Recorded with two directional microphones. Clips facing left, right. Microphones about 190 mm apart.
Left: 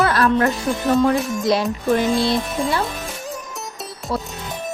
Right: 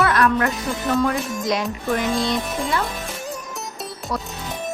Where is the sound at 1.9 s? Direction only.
30° left (ahead or behind).